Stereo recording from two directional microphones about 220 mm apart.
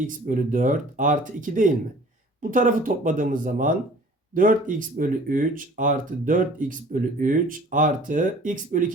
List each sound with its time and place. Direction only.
0.3 s speech: 35° right (ahead or behind)